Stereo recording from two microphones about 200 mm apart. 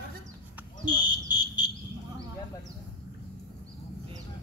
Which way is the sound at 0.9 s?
20° left (ahead or behind).